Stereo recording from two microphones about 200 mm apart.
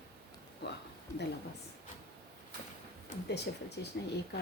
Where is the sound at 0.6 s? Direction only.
60° left (ahead or behind).